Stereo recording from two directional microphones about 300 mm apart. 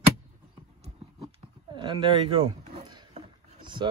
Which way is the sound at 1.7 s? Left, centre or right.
Centre.